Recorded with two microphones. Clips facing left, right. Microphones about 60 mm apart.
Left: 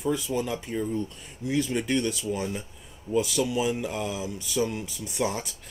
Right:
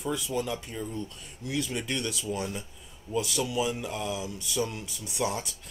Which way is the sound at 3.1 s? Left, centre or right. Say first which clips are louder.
Left 4 dB; left.